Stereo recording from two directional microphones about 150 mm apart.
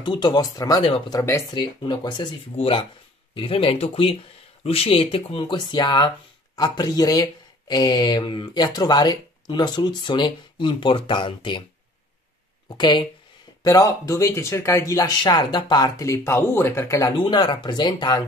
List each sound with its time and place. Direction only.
0.0 s speech: 30° left (ahead or behind)
12.6 s speech: 30° left (ahead or behind)
17.2 s speech: 30° left (ahead or behind)